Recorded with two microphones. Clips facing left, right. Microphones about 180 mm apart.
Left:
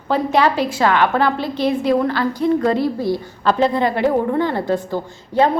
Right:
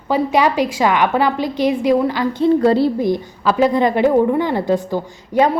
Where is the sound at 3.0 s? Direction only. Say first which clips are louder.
Right 3 dB; 20° right (ahead or behind).